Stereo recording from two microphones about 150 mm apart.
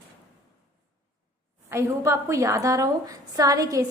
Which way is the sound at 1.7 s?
20° right (ahead or behind).